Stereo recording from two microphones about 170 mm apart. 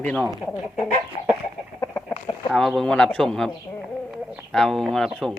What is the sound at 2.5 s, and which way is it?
A man's voice, centre (ahead or behind).